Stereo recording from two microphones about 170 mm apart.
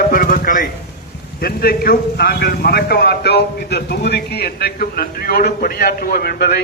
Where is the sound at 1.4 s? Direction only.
60° left (ahead or behind).